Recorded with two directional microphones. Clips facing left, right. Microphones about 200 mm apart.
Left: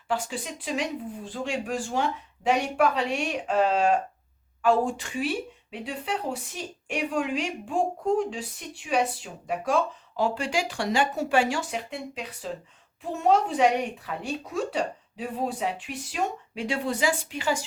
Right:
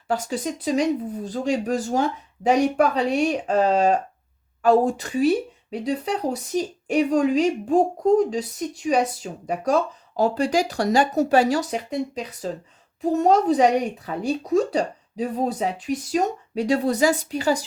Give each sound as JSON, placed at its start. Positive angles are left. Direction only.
{"t": 0.1, "sound": "speech", "side_deg": -40}